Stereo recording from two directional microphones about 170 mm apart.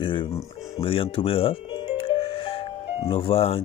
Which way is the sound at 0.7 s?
30° left (ahead or behind).